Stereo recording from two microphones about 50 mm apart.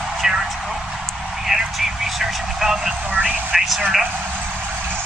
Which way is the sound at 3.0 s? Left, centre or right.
Right.